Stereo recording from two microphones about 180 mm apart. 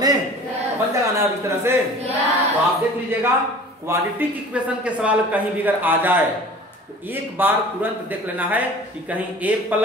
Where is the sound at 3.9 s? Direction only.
10° right (ahead or behind).